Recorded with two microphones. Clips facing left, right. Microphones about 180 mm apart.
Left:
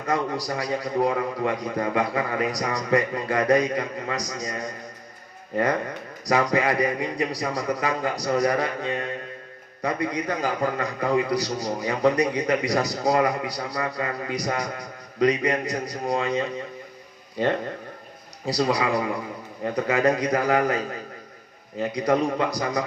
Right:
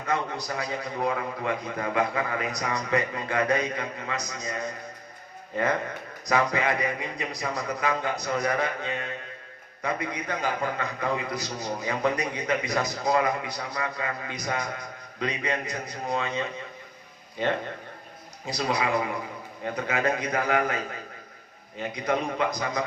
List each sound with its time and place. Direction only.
0.0 s a man's voice: 35° left (ahead or behind)
6.2 s a man's voice: 35° left (ahead or behind)
18.4 s a man's voice: 35° left (ahead or behind)
21.8 s a man's voice: 35° left (ahead or behind)